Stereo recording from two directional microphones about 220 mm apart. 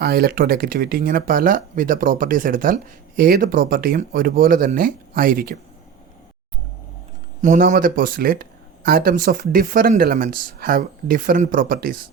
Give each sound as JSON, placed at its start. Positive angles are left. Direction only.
{"t": 0.0, "sound": "speech", "side_deg": -45}
{"t": 7.4, "sound": "speech", "side_deg": -35}